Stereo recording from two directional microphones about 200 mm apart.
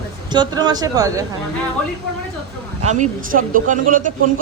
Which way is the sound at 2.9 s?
40° right (ahead or behind).